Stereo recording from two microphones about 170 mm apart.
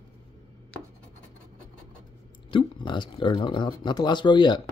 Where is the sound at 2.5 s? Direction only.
30° left (ahead or behind).